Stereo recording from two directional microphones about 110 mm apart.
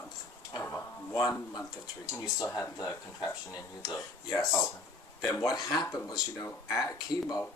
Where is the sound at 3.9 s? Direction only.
30° left (ahead or behind).